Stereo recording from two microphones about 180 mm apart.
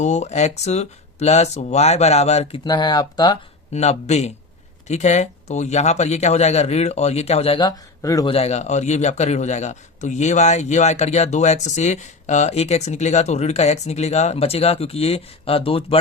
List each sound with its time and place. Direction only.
0.0 s a man's voice: 40° left (ahead or behind)
2.6 s speech: 25° left (ahead or behind)
3.7 s a man's voice: 35° left (ahead or behind); by 8.3 s 20° left (ahead or behind)
8.3 s a man's voice: 35° left (ahead or behind)